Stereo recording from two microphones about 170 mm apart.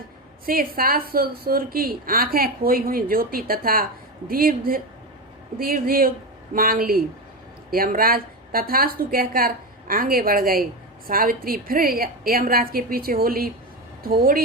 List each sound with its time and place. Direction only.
0.4 s speech: 60° right (ahead or behind)